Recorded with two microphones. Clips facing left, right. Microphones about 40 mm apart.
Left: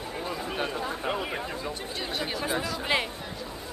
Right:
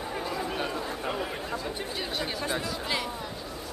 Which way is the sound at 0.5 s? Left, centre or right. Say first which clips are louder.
Left 1 dB; centre.